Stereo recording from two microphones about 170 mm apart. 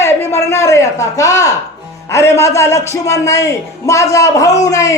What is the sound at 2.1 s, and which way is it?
A man's voice, 15° left (ahead or behind).